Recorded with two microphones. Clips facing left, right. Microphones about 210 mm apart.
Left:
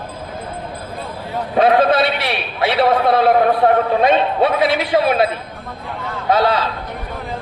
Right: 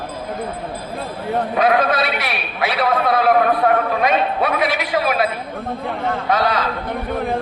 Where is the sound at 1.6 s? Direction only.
30° left (ahead or behind).